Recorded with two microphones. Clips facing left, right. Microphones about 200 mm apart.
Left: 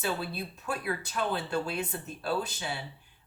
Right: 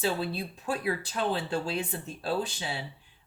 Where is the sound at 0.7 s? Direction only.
30° right (ahead or behind).